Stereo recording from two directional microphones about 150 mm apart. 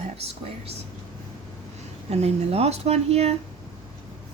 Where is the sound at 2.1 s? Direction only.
45° right (ahead or behind).